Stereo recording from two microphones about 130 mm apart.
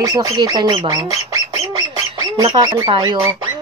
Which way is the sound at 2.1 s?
25° right (ahead or behind).